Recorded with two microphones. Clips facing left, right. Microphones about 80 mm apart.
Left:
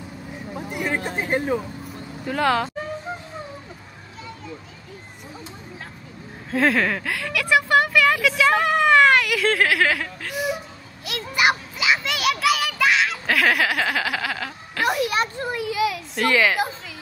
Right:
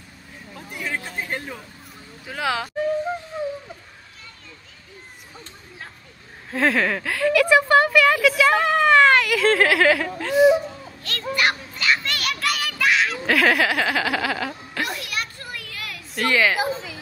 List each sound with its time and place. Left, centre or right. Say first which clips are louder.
0.7 s a sound: left 4 dB; left
2.2 s speech: left 5 dB; centre
6.5 s speech: left 1 dB; centre
11.1 s children playing: left 2 dB; centre
15.0 s children playing: left 8 dB; left
15.7 s a sound: left 11 dB; centre